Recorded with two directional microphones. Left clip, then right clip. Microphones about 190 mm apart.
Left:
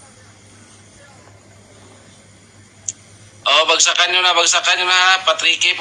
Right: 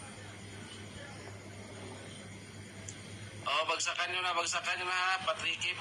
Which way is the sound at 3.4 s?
65° left (ahead or behind).